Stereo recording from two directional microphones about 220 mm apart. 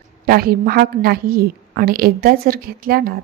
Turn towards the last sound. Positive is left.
turn(degrees=-40)  # may be behind; listen again after turning